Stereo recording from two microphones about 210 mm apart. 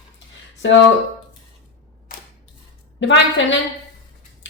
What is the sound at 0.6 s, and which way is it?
Speech, 60° left (ahead or behind).